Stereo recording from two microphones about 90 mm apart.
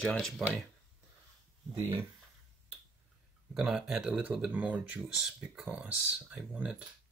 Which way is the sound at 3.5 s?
5° right (ahead or behind).